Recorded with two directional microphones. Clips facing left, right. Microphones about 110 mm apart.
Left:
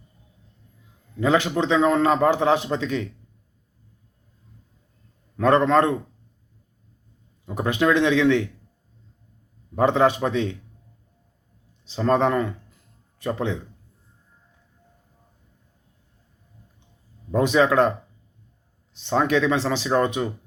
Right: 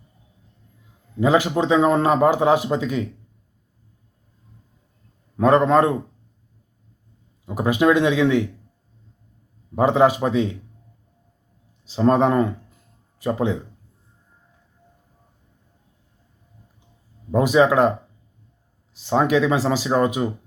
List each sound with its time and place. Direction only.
1.2 s a man's voice: 10° right (ahead or behind)
5.4 s a man's voice: 10° right (ahead or behind)
7.4 s a man's voice: 10° right (ahead or behind)
9.7 s a man's voice: 10° right (ahead or behind)
11.9 s speech: 15° right (ahead or behind)
13.1 s speech: 10° right (ahead or behind)
17.3 s a man's voice: 10° right (ahead or behind)
18.9 s a man's voice: 10° right (ahead or behind)